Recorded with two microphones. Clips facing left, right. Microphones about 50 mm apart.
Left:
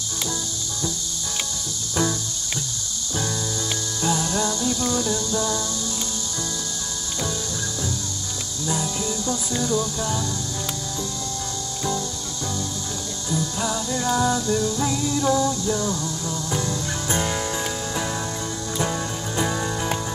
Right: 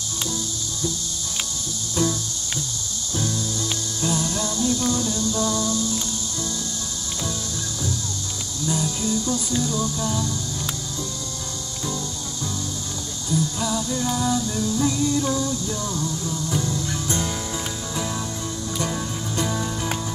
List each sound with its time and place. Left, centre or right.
4.0 s music: centre
5.0 s music: left
8.6 s music: centre
13.3 s music: centre
16.4 s music: left
17.9 s music: centre